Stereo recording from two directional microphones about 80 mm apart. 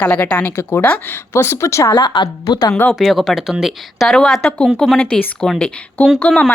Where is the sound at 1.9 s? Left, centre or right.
Left.